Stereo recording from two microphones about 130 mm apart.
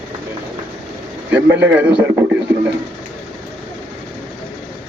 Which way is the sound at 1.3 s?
15° right (ahead or behind).